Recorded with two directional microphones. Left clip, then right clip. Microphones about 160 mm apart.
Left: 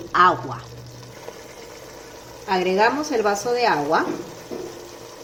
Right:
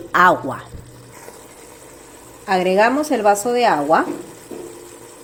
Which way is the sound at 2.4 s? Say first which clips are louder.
Right 4 dB; 70° right (ahead or behind).